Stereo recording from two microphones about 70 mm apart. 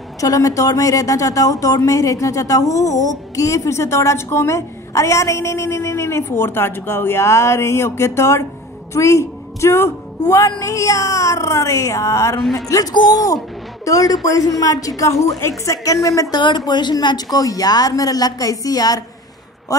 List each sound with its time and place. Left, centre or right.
0.2 s a man's voice: left
16.3 s a woman's voice: left
19.7 s a woman's voice: left